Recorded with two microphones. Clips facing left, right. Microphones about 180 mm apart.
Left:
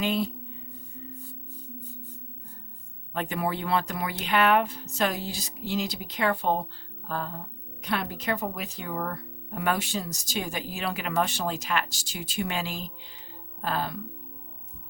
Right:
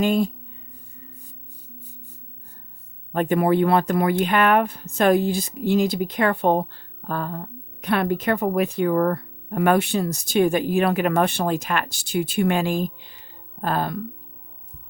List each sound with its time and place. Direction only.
0.0 s speech: 45° right (ahead or behind)
3.1 s speech: 50° right (ahead or behind)